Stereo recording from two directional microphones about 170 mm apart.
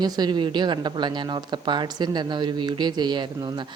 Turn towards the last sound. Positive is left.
turn(degrees=-25)  # may be behind; listen again after turning